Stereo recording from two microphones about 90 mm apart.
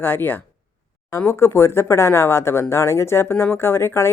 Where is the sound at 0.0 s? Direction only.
25° left (ahead or behind).